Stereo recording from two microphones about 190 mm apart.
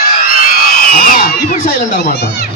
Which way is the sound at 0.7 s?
50° left (ahead or behind).